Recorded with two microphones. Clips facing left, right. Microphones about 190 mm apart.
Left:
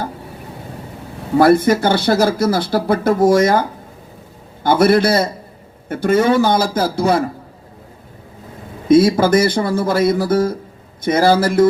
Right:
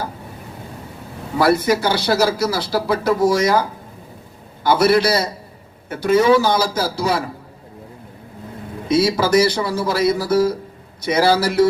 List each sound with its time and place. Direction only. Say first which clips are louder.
1.4 s speech: left 4 dB; 50° left (ahead or behind)
8.9 s speech: left 5 dB; 50° left (ahead or behind)